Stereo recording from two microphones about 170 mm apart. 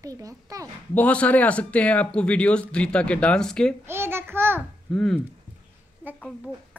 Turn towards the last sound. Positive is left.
turn(degrees=5)  # may be behind; listen again after turning